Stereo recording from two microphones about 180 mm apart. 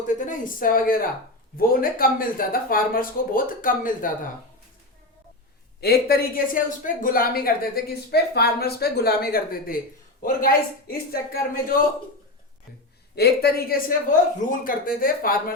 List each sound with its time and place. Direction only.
0.1 s speech: 45° left (ahead or behind)
5.8 s speech: 60° left (ahead or behind)
13.1 s speech: 60° left (ahead or behind)